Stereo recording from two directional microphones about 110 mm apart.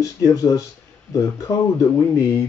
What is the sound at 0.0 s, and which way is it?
Speech, 30° left (ahead or behind).